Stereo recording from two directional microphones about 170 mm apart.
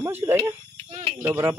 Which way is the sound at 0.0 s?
15° right (ahead or behind).